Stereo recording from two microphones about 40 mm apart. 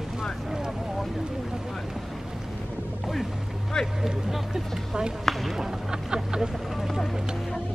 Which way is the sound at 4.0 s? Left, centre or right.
Centre.